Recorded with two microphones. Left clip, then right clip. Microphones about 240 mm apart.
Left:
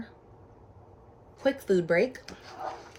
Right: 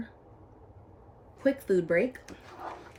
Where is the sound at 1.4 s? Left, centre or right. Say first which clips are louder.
Left 1 dB; centre.